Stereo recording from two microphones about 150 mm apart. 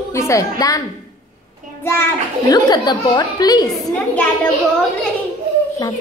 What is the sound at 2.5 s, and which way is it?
A woman's voice, 25° left (ahead or behind).